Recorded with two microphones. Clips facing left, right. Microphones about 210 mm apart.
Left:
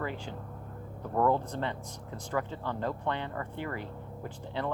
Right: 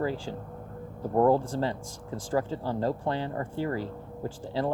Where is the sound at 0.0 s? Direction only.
35° right (ahead or behind).